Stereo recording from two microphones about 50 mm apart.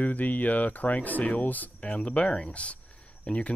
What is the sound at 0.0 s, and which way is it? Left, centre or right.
Speech, left.